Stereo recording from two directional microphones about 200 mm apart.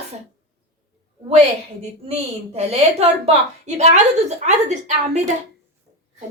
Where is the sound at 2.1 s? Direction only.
30° right (ahead or behind).